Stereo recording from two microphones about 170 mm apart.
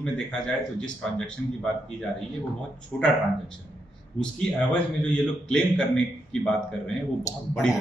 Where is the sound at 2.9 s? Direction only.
5° left (ahead or behind).